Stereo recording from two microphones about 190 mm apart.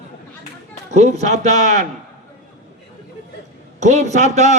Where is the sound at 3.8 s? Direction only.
40° right (ahead or behind).